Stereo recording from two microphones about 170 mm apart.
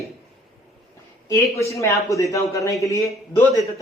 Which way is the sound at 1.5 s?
15° left (ahead or behind).